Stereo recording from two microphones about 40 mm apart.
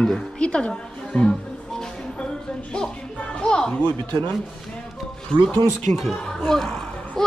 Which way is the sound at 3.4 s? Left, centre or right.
Left.